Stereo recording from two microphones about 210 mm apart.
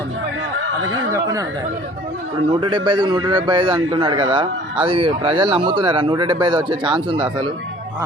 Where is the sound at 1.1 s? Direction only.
15° right (ahead or behind).